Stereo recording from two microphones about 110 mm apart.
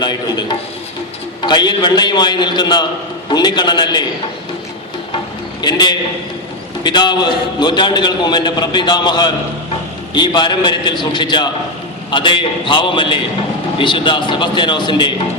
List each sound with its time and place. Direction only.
0.0 s a man's voice: 40° left (ahead or behind)
5.6 s a man's voice: 40° left (ahead or behind)